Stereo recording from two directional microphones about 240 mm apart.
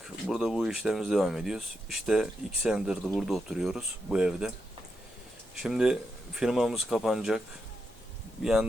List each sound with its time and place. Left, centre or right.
0.0 s speech: centre
5.6 s speech: centre